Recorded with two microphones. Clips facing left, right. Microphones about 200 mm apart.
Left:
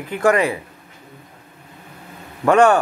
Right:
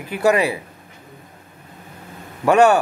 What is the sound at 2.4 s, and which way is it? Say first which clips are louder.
Speech: even; 10° right (ahead or behind).